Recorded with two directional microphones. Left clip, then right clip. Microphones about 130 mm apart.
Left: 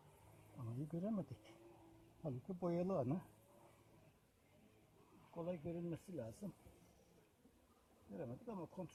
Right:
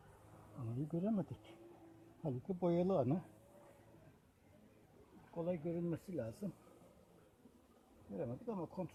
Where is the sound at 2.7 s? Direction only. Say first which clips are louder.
Right 5 dB; 25° left (ahead or behind).